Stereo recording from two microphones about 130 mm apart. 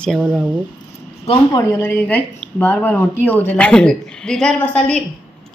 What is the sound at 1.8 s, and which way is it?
A woman's voice, 15° left (ahead or behind).